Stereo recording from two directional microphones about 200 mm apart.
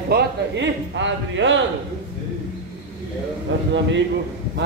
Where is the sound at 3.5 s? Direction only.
70° right (ahead or behind).